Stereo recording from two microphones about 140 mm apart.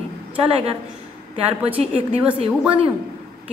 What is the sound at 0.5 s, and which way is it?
Speech, 45° right (ahead or behind).